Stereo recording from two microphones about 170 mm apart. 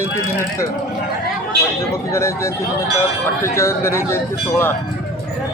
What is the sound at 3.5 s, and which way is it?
Speech, 15° left (ahead or behind).